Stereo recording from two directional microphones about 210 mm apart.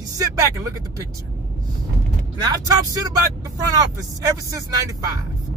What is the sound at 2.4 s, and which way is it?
Speech, 20° right (ahead or behind).